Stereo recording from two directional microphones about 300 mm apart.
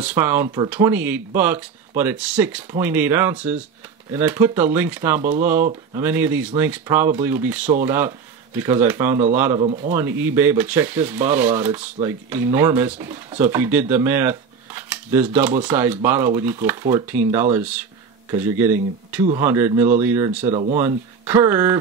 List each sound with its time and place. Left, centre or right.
0.0 s speech: centre
9.6 s speech: right
9.9 s speech: centre